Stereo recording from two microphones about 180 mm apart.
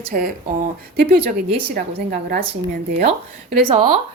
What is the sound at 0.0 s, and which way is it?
A woman's voice, 50° right (ahead or behind).